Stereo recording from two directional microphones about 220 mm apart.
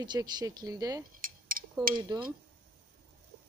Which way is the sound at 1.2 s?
40° right (ahead or behind).